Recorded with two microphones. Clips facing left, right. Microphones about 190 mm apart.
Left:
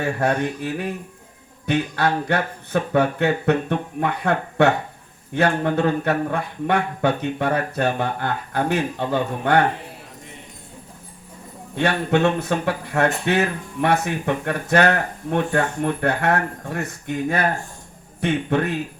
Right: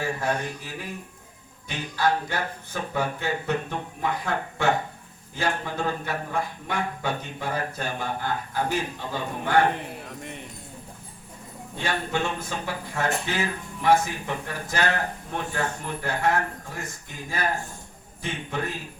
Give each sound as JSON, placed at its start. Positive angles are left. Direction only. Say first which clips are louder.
{"t": 0.0, "sound": "speech", "louder": "left 6 dB", "side_deg": 65}
{"t": 11.8, "sound": "speech", "louder": "left 9 dB", "side_deg": 65}